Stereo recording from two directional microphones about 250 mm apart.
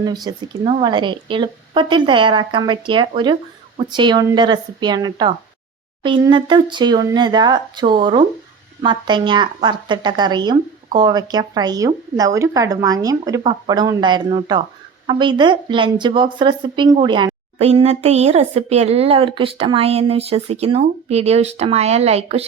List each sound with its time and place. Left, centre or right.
0.0 s a woman's voice: centre